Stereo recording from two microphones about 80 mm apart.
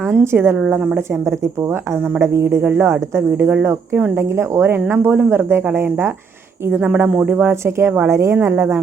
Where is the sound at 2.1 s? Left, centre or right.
Right.